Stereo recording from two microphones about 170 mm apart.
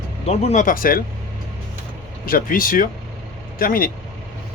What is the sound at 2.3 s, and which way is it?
Speech, 55° left (ahead or behind).